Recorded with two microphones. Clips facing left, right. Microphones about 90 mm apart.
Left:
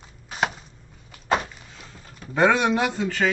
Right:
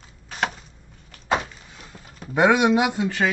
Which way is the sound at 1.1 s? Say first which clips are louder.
Even; centre (ahead or behind).